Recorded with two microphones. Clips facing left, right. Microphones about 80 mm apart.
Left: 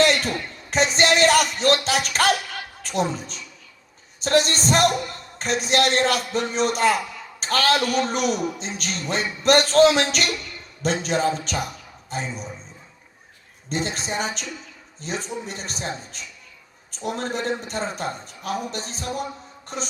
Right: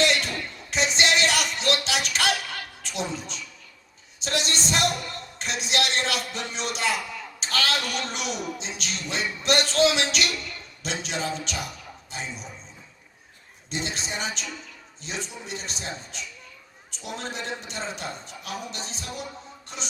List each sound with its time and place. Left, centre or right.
0.0 s music: left
2.8 s a man's voice: left
13.7 s a man's voice: left
19.6 s music: left